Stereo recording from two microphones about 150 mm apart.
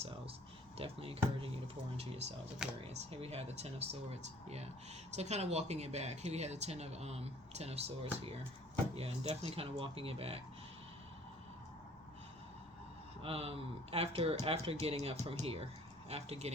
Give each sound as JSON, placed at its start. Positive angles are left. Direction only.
{"t": 0.8, "sound": "speech", "side_deg": -40}
{"t": 13.2, "sound": "speech", "side_deg": -40}